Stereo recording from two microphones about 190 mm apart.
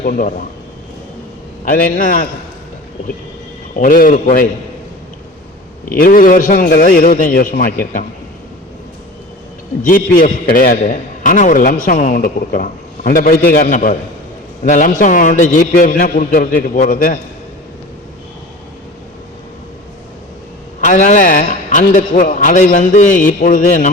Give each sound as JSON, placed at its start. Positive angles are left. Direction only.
{"t": 0.0, "sound": "a man's voice", "side_deg": 45}
{"t": 1.7, "sound": "a man's voice", "side_deg": 45}
{"t": 3.8, "sound": "a man's voice", "side_deg": 45}
{"t": 5.9, "sound": "a man's voice", "side_deg": 45}
{"t": 9.8, "sound": "a man's voice", "side_deg": 45}
{"t": 20.8, "sound": "a man's voice", "side_deg": 40}